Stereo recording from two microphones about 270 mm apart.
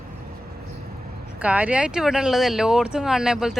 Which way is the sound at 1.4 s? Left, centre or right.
Centre.